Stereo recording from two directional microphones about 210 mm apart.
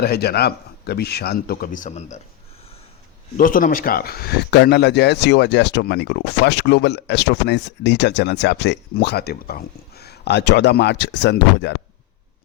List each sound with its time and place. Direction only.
0.0 s speech: 50° left (ahead or behind); by 2.2 s 35° left (ahead or behind)
3.3 s speech: 40° left (ahead or behind)